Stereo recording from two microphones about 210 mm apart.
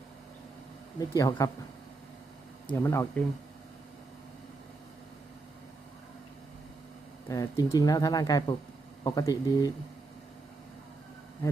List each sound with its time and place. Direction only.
0.9 s speech: 15° left (ahead or behind)
2.8 s speech: 10° left (ahead or behind)
7.3 s speech: 15° left (ahead or behind)